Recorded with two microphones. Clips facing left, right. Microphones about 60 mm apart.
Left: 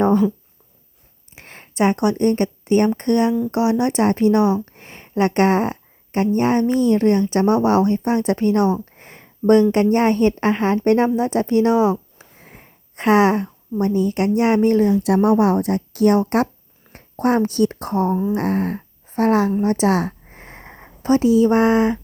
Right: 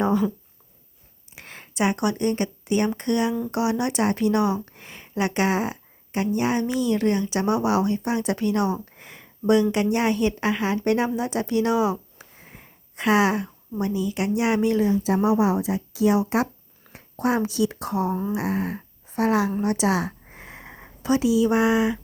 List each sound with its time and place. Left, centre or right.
1.4 s speech: left
9.0 s a sound: left
9.9 s speech: left
12.5 s a sound: left
13.8 s speech: left
14.9 s speech: left
18.1 s a sound: centre
18.3 s a woman's voice: left
20.3 s wheeze: left
21.0 s speech: left